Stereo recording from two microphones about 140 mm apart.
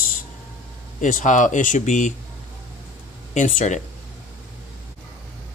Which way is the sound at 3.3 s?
60° left (ahead or behind).